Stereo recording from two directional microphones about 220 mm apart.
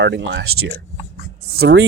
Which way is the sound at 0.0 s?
55° right (ahead or behind).